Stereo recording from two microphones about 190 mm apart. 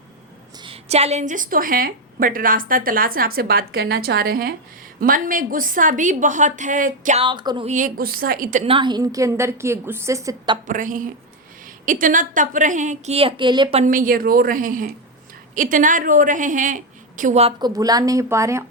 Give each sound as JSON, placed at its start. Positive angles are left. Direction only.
{"t": 0.6, "sound": "a woman's voice", "side_deg": -30}
{"t": 7.2, "sound": "speech", "side_deg": -25}
{"t": 7.7, "sound": "a woman's voice", "side_deg": -45}
{"t": 8.6, "sound": "a woman's voice", "side_deg": -25}
{"t": 10.7, "sound": "a woman's voice", "side_deg": -45}
{"t": 13.8, "sound": "a woman's voice", "side_deg": -45}
{"t": 17.6, "sound": "a woman's voice", "side_deg": -20}